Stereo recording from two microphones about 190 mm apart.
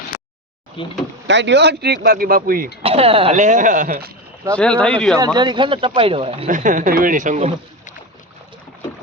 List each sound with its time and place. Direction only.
0.8 s speech: 25° left (ahead or behind)
1.3 s speech: 70° right (ahead or behind); by 2.6 s 50° right (ahead or behind)
2.8 s speech: 30° right (ahead or behind); by 4.1 s 50° right (ahead or behind)
4.5 s speech: 5° left (ahead or behind)
5.1 s speech: 20° right (ahead or behind); by 7.5 s 40° right (ahead or behind)